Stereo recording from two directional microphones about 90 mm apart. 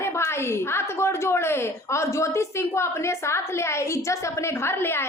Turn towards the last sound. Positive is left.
turn(degrees=25)  # may be behind; listen again after turning